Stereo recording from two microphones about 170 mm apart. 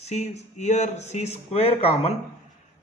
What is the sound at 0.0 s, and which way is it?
A man's voice, 40° left (ahead or behind).